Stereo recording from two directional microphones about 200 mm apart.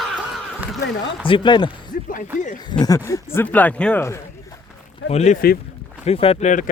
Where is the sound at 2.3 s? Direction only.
40° left (ahead or behind).